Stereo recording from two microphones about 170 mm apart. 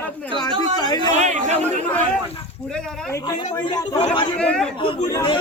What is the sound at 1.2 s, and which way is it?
Speech, 40° right (ahead or behind).